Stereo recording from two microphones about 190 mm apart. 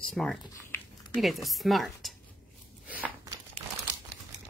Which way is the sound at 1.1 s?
Centre (ahead or behind).